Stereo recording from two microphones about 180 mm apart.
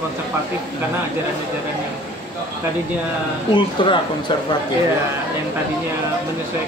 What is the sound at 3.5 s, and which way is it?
Speech, 25° left (ahead or behind).